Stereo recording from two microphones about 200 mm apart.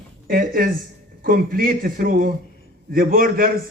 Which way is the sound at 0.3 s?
45° right (ahead or behind).